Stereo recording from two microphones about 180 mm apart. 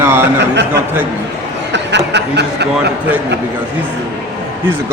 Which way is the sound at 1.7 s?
75° right (ahead or behind).